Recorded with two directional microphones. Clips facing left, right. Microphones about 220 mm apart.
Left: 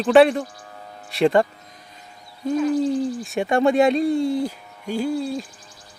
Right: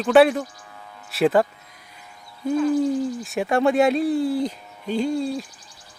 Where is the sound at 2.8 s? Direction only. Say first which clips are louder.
Left 1 dB; centre (ahead or behind).